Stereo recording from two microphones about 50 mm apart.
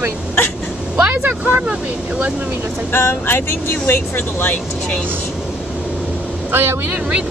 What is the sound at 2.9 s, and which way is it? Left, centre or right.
Speech, left.